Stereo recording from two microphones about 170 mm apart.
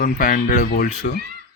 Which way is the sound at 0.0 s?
55° left (ahead or behind).